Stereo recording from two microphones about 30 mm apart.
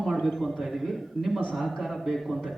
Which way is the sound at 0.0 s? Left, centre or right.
Centre.